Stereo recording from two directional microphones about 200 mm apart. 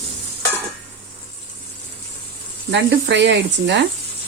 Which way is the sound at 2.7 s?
60° right (ahead or behind).